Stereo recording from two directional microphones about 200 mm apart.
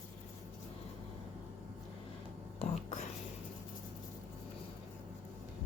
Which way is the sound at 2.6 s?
35° left (ahead or behind).